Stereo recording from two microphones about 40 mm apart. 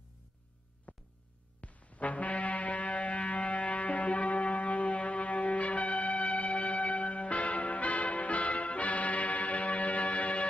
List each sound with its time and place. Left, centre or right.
0.9 s music: left